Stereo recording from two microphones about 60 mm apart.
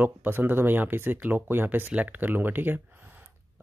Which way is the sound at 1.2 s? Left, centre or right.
Right.